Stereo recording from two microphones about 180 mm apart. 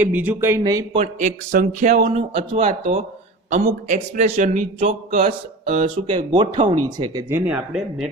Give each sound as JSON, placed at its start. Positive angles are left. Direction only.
{"t": 0.0, "sound": "speech", "side_deg": -10}
{"t": 0.9, "sound": "a man's voice", "side_deg": -40}
{"t": 5.9, "sound": "speech", "side_deg": -25}